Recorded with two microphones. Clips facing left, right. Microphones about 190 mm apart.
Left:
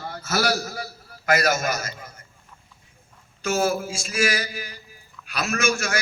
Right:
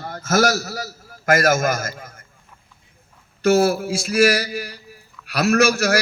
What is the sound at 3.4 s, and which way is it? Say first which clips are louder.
A man's voice: right 7 dB; 65° right (ahead or behind).